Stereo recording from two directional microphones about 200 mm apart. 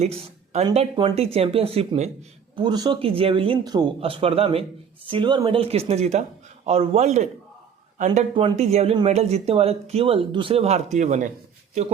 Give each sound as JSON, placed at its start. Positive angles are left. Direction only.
{"t": 0.0, "sound": "speech", "side_deg": -35}